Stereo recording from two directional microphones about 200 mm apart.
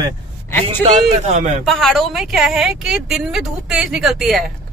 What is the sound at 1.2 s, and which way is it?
Speech, 35° right (ahead or behind).